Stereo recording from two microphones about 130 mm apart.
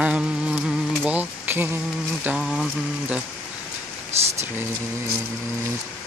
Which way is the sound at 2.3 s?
5° right (ahead or behind).